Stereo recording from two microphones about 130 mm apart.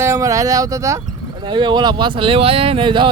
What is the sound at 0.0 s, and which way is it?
Speech, 25° right (ahead or behind).